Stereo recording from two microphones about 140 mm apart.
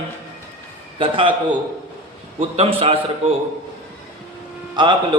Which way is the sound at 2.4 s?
45° right (ahead or behind).